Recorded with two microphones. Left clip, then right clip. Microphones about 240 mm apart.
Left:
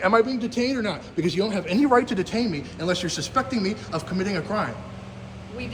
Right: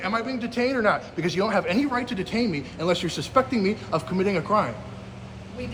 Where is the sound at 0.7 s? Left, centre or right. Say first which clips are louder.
Right 6 dB; right.